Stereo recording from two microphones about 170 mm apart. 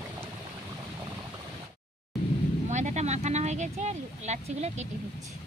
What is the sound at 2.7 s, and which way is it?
Vehicle, 45° right (ahead or behind).